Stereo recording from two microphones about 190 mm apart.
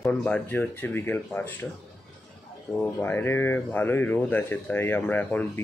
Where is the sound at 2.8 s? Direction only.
10° left (ahead or behind).